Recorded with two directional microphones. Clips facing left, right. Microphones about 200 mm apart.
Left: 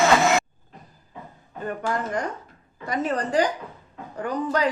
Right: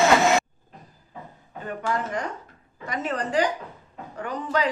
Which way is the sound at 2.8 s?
35° left (ahead or behind).